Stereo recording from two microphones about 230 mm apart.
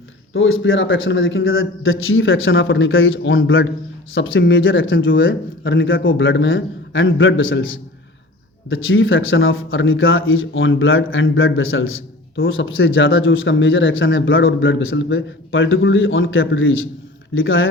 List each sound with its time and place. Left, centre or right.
0.3 s speech: left